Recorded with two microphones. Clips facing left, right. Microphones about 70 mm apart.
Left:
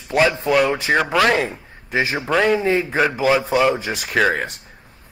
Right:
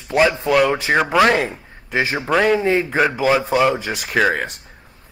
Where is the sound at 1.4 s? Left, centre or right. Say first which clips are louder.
Even; right.